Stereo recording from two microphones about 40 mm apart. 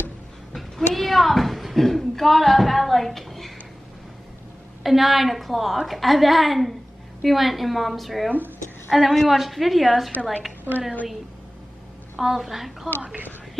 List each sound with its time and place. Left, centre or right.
0.6 s a sound: centre
4.8 s a woman's voice: centre
10.1 s a woman's voice: left
12.2 s a woman's voice: centre